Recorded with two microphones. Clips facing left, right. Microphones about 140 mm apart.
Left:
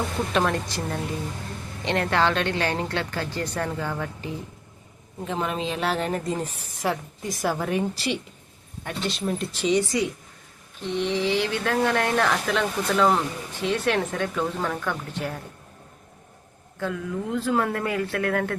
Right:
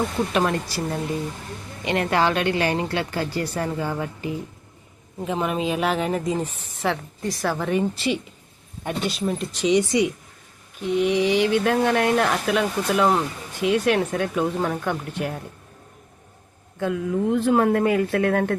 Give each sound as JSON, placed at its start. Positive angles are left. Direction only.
{"t": 0.3, "sound": "speech", "side_deg": -5}
{"t": 9.7, "sound": "speech", "side_deg": -20}
{"t": 10.8, "sound": "speech", "side_deg": -10}
{"t": 16.8, "sound": "speech", "side_deg": -20}